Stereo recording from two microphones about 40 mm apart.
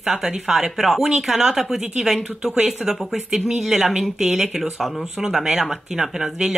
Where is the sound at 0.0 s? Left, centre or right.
Centre.